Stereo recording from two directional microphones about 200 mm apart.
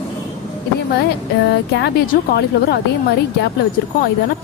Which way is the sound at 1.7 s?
55° left (ahead or behind).